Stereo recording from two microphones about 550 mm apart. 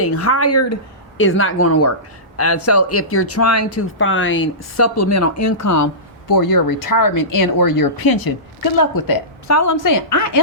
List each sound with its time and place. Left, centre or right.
0.0 s a woman's voice: left